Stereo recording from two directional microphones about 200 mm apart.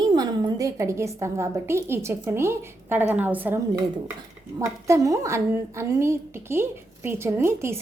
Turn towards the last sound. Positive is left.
turn(degrees=-15)  # may be behind; listen again after turning